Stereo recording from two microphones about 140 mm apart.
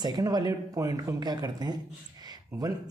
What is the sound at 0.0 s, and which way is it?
A woman's voice, 30° right (ahead or behind).